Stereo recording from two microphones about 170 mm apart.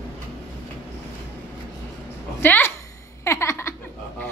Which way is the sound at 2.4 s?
10° left (ahead or behind).